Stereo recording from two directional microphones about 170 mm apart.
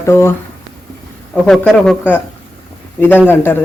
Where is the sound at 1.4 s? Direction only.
5° left (ahead or behind).